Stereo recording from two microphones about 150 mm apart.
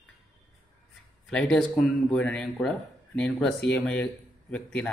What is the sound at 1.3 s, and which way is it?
A man's voice, 5° left (ahead or behind).